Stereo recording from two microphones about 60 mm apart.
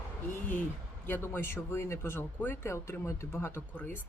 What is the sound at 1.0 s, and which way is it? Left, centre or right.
Speech, left.